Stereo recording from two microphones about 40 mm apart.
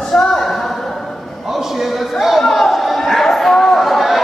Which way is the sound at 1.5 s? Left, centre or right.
Centre.